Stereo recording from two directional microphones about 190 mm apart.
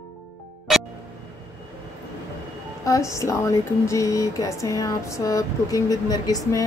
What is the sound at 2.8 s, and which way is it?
Speech, 15° left (ahead or behind).